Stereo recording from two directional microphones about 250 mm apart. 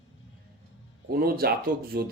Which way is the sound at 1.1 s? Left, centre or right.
Right.